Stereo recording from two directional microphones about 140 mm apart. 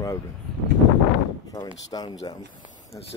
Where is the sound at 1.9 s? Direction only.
30° left (ahead or behind).